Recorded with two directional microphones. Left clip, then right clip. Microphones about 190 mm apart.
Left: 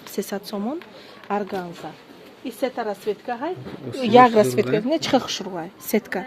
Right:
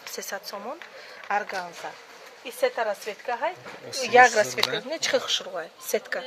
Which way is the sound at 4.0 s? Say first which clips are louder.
Left 3 dB; 50° left (ahead or behind).